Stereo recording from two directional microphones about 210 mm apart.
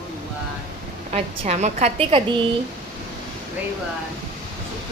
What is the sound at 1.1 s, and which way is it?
A woman's voice, 30° right (ahead or behind).